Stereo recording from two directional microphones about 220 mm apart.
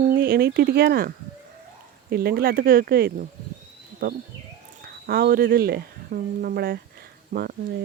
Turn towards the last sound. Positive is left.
turn(degrees=-45)  # may be behind; listen again after turning